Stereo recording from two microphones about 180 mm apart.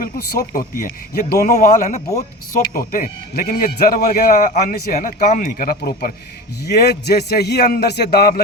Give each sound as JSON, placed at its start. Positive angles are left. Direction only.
{"t": 0.0, "sound": "a man's voice", "side_deg": 55}